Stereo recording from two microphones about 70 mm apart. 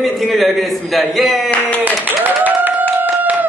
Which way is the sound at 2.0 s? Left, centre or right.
Right.